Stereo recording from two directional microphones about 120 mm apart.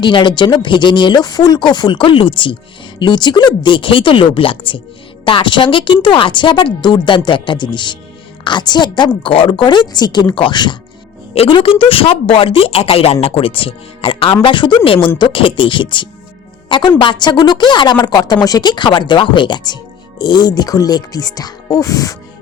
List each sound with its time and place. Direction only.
0.0 s a woman's voice: 40° left (ahead or behind)